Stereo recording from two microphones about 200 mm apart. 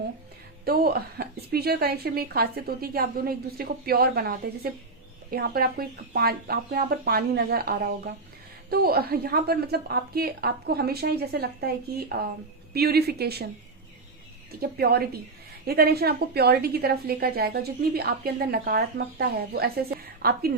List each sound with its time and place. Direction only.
0.6 s a woman's voice: 50° right (ahead or behind)
14.6 s a woman's voice: 50° right (ahead or behind)